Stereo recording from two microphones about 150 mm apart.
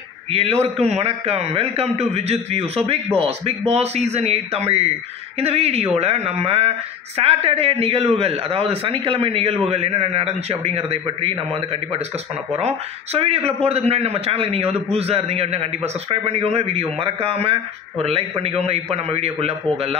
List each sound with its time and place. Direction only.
0.3 s a man's voice: 45° right (ahead or behind)